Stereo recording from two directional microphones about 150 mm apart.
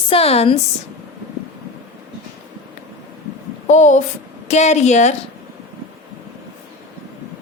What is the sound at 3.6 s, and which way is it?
A woman's voice, 55° left (ahead or behind).